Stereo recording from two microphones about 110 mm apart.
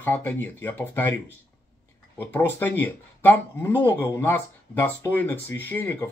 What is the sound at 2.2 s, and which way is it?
Speech, 15° left (ahead or behind).